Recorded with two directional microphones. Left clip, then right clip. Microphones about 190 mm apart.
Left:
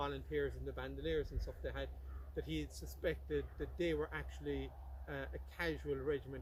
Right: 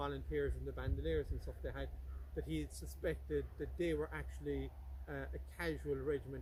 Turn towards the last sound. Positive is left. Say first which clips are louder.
# even
turn(degrees=-20)  # may be behind; listen again after turning